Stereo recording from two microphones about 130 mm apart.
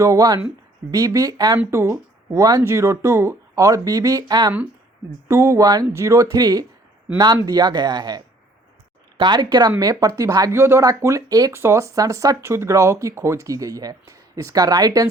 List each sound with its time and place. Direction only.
0.0 s speech: 25° right (ahead or behind)